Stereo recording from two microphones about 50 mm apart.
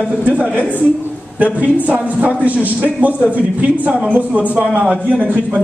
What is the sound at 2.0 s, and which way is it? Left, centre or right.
A man's voice, right.